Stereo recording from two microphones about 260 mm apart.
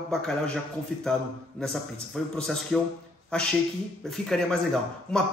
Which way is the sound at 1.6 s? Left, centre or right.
Centre.